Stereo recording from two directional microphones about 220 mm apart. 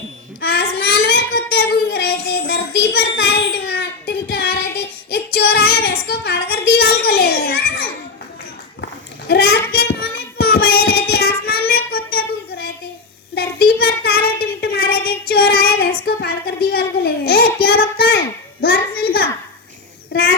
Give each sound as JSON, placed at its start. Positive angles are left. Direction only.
{"t": 0.4, "sound": "child singing", "side_deg": 45}
{"t": 5.1, "sound": "female singing", "side_deg": 45}
{"t": 9.2, "sound": "child singing", "side_deg": 45}
{"t": 16.0, "sound": "a sound", "side_deg": 45}